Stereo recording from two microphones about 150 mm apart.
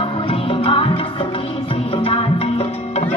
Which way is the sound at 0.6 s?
40° left (ahead or behind).